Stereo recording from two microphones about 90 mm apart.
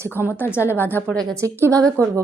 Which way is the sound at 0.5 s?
25° left (ahead or behind).